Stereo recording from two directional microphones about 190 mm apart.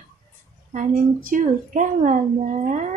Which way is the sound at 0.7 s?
45° right (ahead or behind).